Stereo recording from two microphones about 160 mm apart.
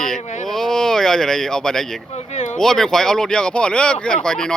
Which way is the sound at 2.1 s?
45° left (ahead or behind).